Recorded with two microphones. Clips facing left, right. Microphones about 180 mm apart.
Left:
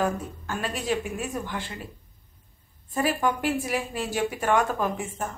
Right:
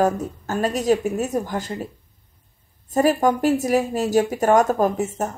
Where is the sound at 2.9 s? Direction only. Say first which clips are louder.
Right 7 dB; 40° right (ahead or behind).